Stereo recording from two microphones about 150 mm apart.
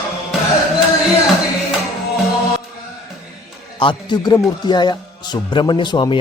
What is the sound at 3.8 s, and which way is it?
A man's voice, 30° left (ahead or behind).